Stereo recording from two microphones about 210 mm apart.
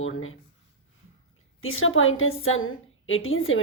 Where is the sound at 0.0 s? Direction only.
70° left (ahead or behind).